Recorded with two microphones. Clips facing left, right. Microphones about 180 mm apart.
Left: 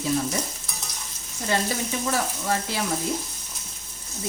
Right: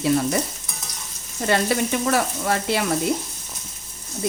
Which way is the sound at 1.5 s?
70° right (ahead or behind).